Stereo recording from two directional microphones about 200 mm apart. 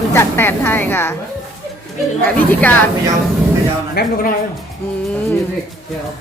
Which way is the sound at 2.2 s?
5° left (ahead or behind).